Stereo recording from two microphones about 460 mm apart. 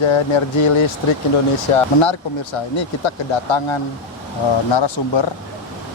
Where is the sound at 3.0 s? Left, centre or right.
Left.